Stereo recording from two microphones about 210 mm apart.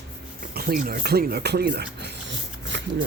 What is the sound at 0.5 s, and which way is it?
Speech, 45° right (ahead or behind).